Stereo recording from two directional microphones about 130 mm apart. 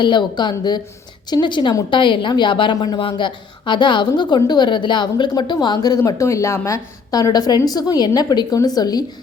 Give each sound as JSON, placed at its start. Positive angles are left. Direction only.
{"t": 0.0, "sound": "a woman's voice", "side_deg": 35}